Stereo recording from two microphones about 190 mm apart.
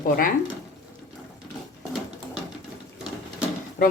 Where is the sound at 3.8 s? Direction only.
45° left (ahead or behind).